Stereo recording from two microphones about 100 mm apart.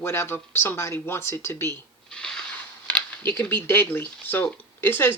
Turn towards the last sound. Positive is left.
turn(degrees=20)  # may be behind; listen again after turning